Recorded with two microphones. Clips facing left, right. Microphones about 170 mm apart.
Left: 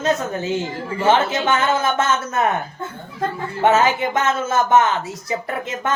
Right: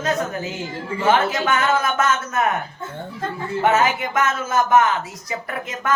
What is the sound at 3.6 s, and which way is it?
Speech, 25° left (ahead or behind).